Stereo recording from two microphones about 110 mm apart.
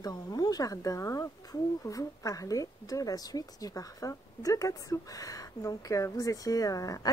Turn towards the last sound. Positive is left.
turn(degrees=35)  # may be behind; listen again after turning